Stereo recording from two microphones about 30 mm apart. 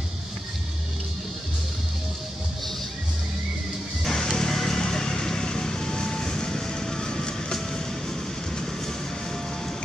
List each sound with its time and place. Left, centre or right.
4.0 s vehicle: centre